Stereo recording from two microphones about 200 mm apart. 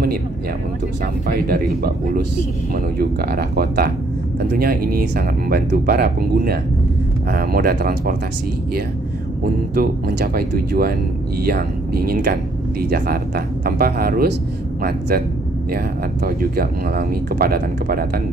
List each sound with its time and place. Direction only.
1.2 s speech: 45° right (ahead or behind)
9.8 s speech: 50° right (ahead or behind)